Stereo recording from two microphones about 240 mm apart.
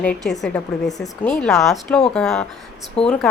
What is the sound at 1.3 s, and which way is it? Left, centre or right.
A woman's voice, centre.